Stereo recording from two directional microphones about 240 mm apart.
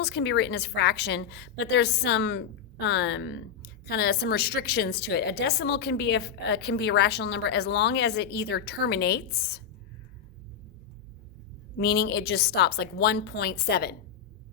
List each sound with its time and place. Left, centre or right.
0.0 s a woman's voice: left
11.8 s a woman's voice: left